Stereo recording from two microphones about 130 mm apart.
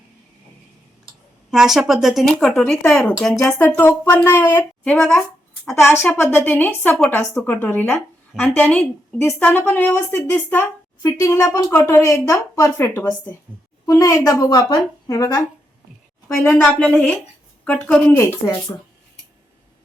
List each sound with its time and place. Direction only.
1.5 s a woman's voice: 5° right (ahead or behind); by 3.9 s 10° left (ahead or behind)
4.0 s a woman's voice: 25° left (ahead or behind)
5.9 s a woman's voice: 15° left (ahead or behind)
16.5 s a woman's voice: 5° left (ahead or behind)
18.2 s a woman's voice: 25° left (ahead or behind)